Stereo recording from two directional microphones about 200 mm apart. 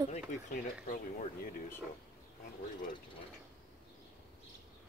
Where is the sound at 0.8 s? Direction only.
40° left (ahead or behind).